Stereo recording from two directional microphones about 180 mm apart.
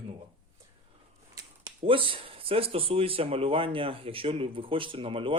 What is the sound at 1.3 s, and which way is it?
Speech, 25° right (ahead or behind).